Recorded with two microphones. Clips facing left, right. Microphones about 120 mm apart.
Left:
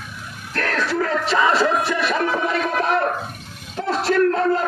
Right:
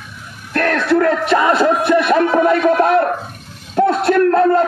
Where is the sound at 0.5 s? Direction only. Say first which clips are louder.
Right 8 dB; 60° right (ahead or behind).